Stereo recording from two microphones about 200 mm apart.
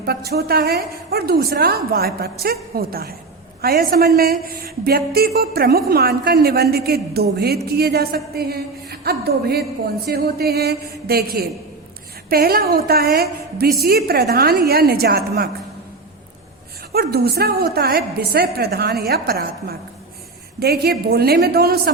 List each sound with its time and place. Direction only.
0.0 s a woman's voice: 55° right (ahead or behind)
16.9 s a woman's voice: 50° right (ahead or behind)